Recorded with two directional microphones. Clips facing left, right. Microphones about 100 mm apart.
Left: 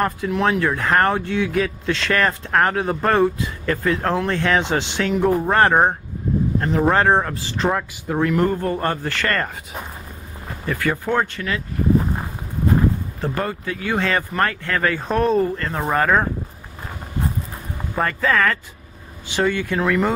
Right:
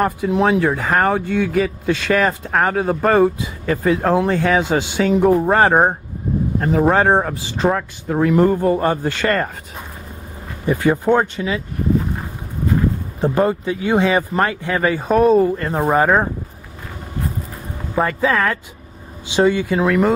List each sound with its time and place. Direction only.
0.3 s speech: 15° right (ahead or behind)
0.8 s speech: 5° right (ahead or behind)
7.7 s speech: centre (ahead or behind); by 9.5 s 15° right (ahead or behind)
10.6 s speech: 20° right (ahead or behind)
13.2 s speech: 20° right (ahead or behind)
15.5 s speech: 20° right (ahead or behind)
17.9 s speech: 10° right (ahead or behind)